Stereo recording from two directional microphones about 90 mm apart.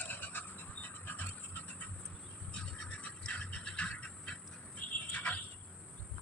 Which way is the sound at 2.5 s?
10° left (ahead or behind).